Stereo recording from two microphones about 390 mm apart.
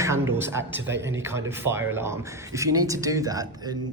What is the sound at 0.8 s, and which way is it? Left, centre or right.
Speech, right.